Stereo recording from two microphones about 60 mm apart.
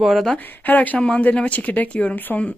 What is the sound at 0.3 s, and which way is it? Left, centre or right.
Speech, left.